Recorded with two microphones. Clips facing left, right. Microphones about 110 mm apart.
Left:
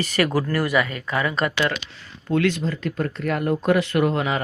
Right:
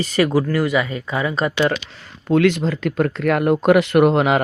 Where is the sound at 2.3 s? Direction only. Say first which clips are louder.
Right 5 dB; 65° right (ahead or behind).